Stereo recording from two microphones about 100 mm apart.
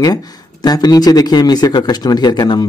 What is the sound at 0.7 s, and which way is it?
Speech, 40° left (ahead or behind).